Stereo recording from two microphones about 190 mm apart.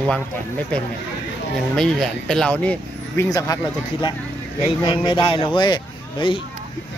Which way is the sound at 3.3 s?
20° left (ahead or behind).